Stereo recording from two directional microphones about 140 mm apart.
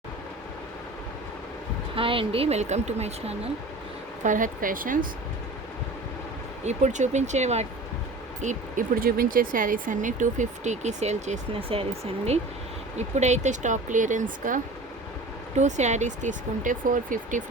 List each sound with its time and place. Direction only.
2.0 s speech: 40° right (ahead or behind)
4.2 s speech: 70° right (ahead or behind)
6.7 s speech: 60° right (ahead or behind)
8.4 s speech: 65° right (ahead or behind)
15.5 s speech: 55° right (ahead or behind)